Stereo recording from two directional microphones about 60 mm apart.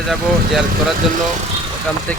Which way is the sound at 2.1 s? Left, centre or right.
Left.